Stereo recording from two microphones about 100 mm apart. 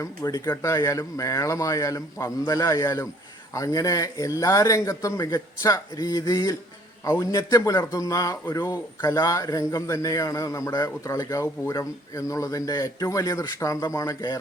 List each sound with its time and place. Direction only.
0.0 s speech: 35° left (ahead or behind)